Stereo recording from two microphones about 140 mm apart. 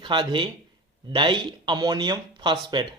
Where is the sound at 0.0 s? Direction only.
35° right (ahead or behind).